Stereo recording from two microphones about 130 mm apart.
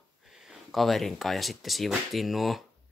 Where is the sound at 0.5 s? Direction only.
Centre (ahead or behind).